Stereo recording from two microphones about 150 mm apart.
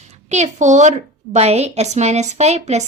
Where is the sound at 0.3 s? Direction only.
50° right (ahead or behind).